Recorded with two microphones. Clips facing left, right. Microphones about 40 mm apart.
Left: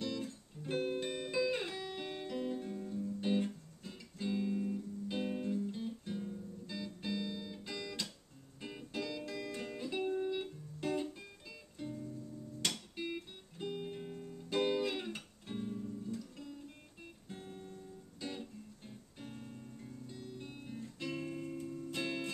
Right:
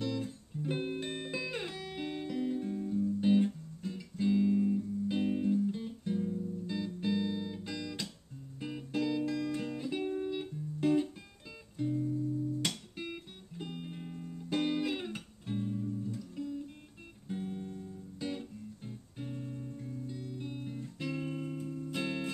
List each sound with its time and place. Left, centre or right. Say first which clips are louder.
0.0 s music: right 4 dB; centre
6.1 s guitar: right 8 dB; centre
6.7 s music: right 6 dB; centre
12.6 s music: right 1 dB; centre